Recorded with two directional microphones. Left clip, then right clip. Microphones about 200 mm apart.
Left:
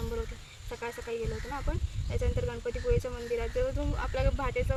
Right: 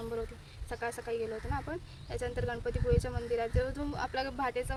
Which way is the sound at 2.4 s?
20° right (ahead or behind).